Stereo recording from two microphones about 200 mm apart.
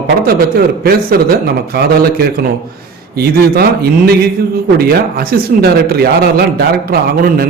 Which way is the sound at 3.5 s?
50° right (ahead or behind).